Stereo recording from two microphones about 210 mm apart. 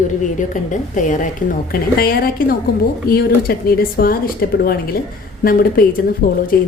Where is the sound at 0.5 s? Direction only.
35° left (ahead or behind).